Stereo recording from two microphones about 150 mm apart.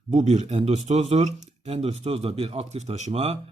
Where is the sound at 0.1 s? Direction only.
50° right (ahead or behind).